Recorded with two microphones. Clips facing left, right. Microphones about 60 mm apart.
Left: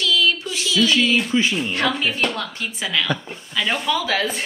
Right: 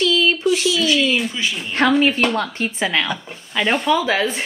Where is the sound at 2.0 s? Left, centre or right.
Right.